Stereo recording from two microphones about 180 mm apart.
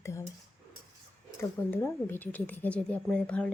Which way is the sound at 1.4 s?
15° left (ahead or behind).